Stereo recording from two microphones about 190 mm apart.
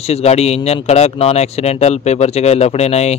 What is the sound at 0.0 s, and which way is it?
Speech, 35° left (ahead or behind).